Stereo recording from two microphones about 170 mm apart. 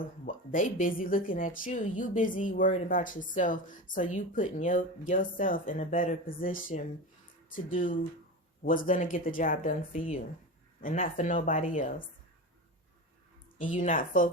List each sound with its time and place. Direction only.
0.0 s a woman's voice: 55° left (ahead or behind)
10.8 s a woman's voice: 55° left (ahead or behind)
13.6 s a woman's voice: 50° left (ahead or behind)